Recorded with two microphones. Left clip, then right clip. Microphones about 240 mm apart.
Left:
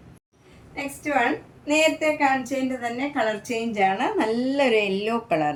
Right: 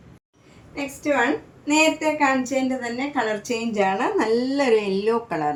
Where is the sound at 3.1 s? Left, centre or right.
Centre.